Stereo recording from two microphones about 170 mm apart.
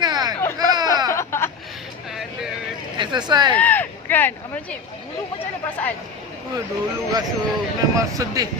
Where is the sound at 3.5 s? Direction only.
10° left (ahead or behind).